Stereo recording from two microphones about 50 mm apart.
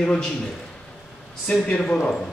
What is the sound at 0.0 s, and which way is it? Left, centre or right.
Speech, centre.